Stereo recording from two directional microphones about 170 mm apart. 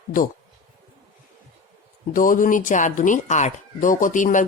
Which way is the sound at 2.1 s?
50° left (ahead or behind).